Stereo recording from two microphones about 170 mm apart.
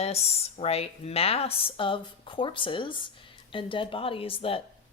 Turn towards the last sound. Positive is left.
turn(degrees=35)  # may be behind; listen again after turning